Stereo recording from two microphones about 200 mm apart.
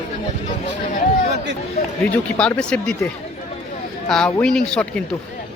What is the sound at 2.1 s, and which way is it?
Speech, 5° left (ahead or behind).